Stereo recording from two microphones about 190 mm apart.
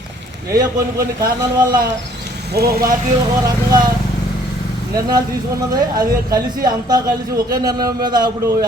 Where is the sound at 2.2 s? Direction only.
55° right (ahead or behind).